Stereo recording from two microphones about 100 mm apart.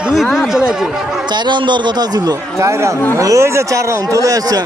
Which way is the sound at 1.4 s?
50° right (ahead or behind).